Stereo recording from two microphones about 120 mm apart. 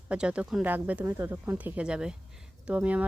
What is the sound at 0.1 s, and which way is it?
A woman's voice, 10° right (ahead or behind).